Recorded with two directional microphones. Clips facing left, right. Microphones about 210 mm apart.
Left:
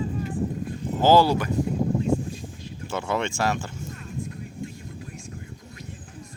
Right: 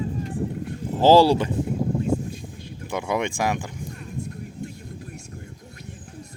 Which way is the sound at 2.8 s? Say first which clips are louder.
Right 2 dB; 15° right (ahead or behind).